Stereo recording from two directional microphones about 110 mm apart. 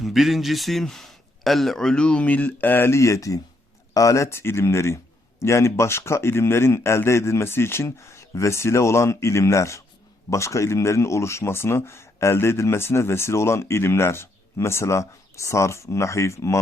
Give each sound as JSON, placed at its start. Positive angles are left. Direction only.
{"t": 0.0, "sound": "speech", "side_deg": 0}